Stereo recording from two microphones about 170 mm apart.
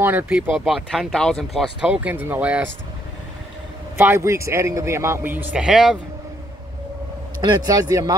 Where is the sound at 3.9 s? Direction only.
15° right (ahead or behind).